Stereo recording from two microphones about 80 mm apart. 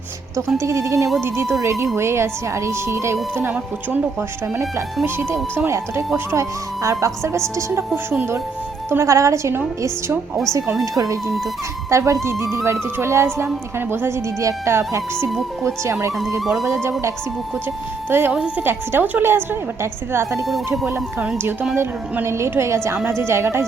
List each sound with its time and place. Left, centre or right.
0.6 s speech: right
3.3 s a woman's voice: right
8.9 s speech: right
10.9 s a woman's voice: right
16.4 s speech: centre
18.3 s a woman's voice: centre
18.6 s a woman's voice: right
21.8 s speech: right